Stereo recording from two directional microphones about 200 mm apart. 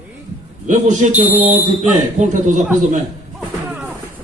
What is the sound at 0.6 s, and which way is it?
Speech, 35° right (ahead or behind).